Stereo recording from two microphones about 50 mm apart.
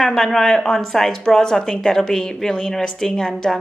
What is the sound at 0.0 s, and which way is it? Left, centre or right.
A woman's voice, centre.